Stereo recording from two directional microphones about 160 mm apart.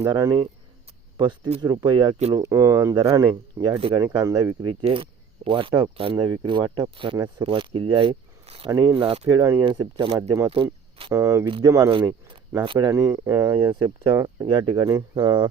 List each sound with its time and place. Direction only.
0.0 s speech: 25° right (ahead or behind)
2.3 s speech: 20° right (ahead or behind)
2.9 s speech: 30° right (ahead or behind)
4.8 s speech: 35° right (ahead or behind)
9.3 s speech: 20° right (ahead or behind)
11.1 s speech: 20° right (ahead or behind)
12.6 s speech: 30° right (ahead or behind)
12.9 s speech: 20° right (ahead or behind)
13.7 s speech: 30° right (ahead or behind)